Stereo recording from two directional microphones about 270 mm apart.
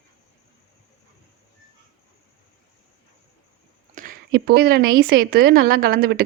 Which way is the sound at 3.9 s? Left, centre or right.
Right.